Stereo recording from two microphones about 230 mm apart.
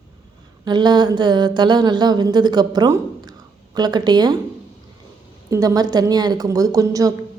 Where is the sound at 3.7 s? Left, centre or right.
Centre.